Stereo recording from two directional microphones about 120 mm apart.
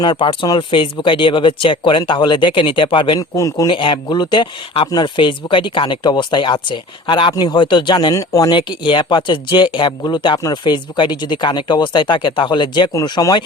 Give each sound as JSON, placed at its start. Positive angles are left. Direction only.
{"t": 0.0, "sound": "speech", "side_deg": 40}
{"t": 3.2, "sound": "a man's voice", "side_deg": 30}
{"t": 3.7, "sound": "speech", "side_deg": 40}
{"t": 8.1, "sound": "a man's voice", "side_deg": 25}
{"t": 8.4, "sound": "speech", "side_deg": 40}
{"t": 12.9, "sound": "a man's voice", "side_deg": 30}